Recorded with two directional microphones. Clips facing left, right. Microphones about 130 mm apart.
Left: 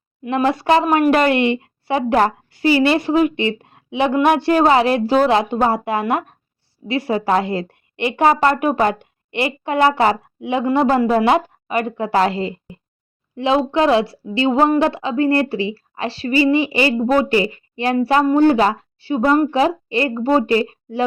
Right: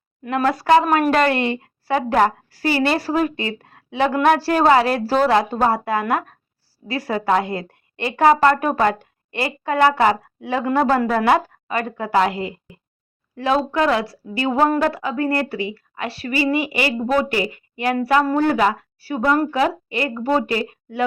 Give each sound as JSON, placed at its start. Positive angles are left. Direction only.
{"t": 0.3, "sound": "a woman's voice", "side_deg": 25}
{"t": 13.3, "sound": "a woman's voice", "side_deg": 20}